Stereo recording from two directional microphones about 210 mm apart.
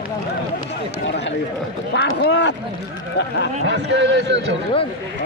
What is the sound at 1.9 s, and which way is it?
Speech, 55° left (ahead or behind).